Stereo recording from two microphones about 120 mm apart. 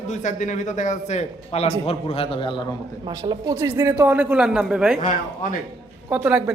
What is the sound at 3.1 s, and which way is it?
A woman's voice, 35° right (ahead or behind).